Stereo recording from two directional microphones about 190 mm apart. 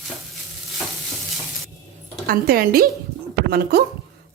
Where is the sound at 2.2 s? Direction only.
50° right (ahead or behind).